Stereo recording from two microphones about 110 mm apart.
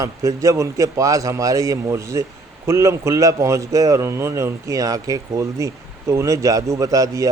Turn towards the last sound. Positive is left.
turn(degrees=-30)  # may be behind; listen again after turning